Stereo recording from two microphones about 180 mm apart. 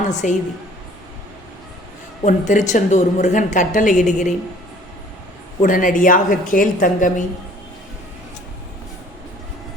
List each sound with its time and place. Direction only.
0.0 s a woman's voice: 45° left (ahead or behind)
2.2 s a woman's voice: 45° left (ahead or behind)
5.6 s a woman's voice: 45° left (ahead or behind)